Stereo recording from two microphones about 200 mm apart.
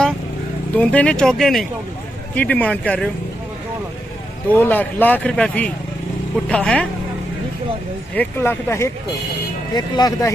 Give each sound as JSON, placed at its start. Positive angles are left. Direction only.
{"t": 0.7, "sound": "speech", "side_deg": 5}
{"t": 4.5, "sound": "speech", "side_deg": 10}
{"t": 8.1, "sound": "speech", "side_deg": 10}